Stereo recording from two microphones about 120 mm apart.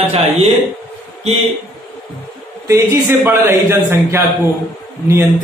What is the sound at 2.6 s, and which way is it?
A man's voice, 25° right (ahead or behind).